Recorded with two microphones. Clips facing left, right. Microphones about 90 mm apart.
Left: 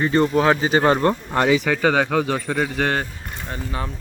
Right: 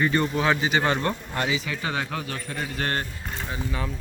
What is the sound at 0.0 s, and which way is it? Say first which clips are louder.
A man's voice: left 6 dB; 30° left (ahead or behind).